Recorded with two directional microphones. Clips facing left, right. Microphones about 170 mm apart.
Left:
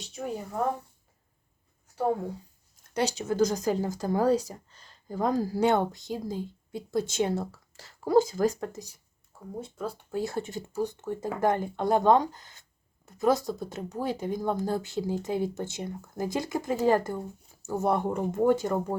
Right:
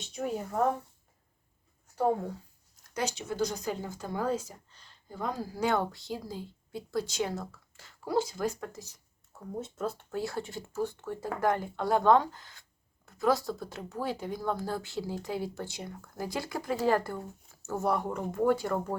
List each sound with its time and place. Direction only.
0.0 s speech: centre (ahead or behind)
2.9 s speech: 30° left (ahead or behind)
3.2 s speech: 45° left (ahead or behind)
5.5 s speech: 25° left (ahead or behind); by 8.4 s 45° left (ahead or behind)
10.1 s speech: 20° left (ahead or behind)